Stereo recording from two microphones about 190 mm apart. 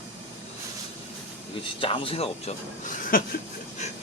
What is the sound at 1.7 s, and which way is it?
Speech, 30° left (ahead or behind).